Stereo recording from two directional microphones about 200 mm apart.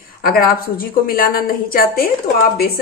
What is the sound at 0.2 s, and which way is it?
A woman's voice, 45° left (ahead or behind).